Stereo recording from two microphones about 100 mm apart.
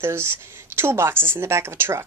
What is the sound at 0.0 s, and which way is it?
A woman's voice, 25° right (ahead or behind).